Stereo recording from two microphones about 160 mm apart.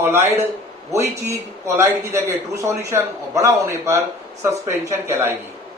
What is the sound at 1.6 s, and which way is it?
Speech, 20° right (ahead or behind).